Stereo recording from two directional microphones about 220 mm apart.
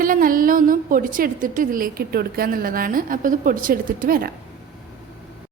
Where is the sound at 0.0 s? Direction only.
40° right (ahead or behind).